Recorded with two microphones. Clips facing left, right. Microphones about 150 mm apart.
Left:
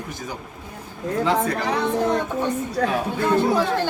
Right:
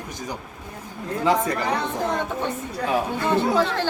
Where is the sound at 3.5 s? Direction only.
15° left (ahead or behind).